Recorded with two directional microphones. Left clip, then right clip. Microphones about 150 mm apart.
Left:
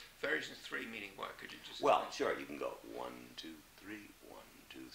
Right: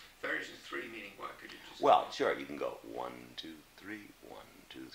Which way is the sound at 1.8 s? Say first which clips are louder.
Right 5 dB; 45° left (ahead or behind).